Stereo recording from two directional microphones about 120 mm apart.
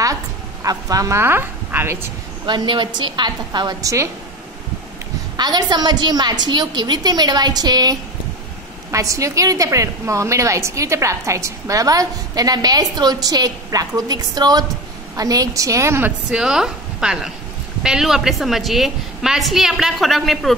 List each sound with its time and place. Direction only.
0.7 s a woman's voice: 30° right (ahead or behind)
2.4 s a woman's voice: 40° right (ahead or behind)
5.4 s a woman's voice: 35° right (ahead or behind)
16.3 s a woman's voice: 5° right (ahead or behind)